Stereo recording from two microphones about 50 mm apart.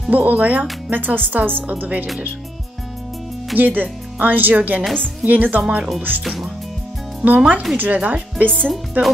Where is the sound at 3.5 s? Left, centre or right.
Right.